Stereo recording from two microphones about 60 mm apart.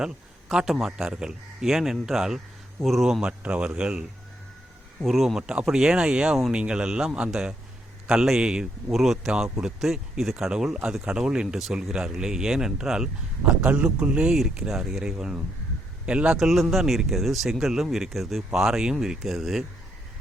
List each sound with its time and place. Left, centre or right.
0.0 s speech: centre
3.2 s speech: centre
4.9 s speech: centre
5.4 s speech: centre
13.5 s speech: right
16.4 s speech: centre